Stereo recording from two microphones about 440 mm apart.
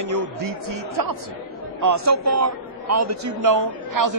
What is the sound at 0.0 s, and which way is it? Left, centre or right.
A man's voice, right.